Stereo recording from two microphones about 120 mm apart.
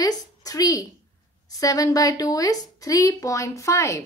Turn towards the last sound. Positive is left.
turn(degrees=25)  # may be behind; listen again after turning